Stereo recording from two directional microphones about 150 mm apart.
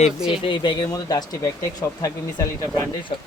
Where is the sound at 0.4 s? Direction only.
30° left (ahead or behind).